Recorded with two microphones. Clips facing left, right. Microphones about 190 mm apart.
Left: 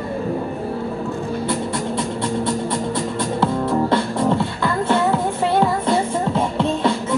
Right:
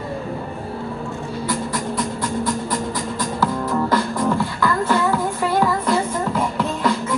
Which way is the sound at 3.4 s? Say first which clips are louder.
Left 2 dB; 25° left (ahead or behind).